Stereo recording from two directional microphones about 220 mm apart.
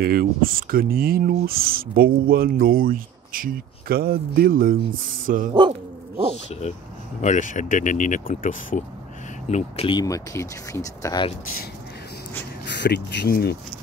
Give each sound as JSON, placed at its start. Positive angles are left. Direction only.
{"t": 0.0, "sound": "speech", "side_deg": -40}
{"t": 5.5, "sound": "speech", "side_deg": -20}
{"t": 7.2, "sound": "speech", "side_deg": 35}
{"t": 12.6, "sound": "speech", "side_deg": 50}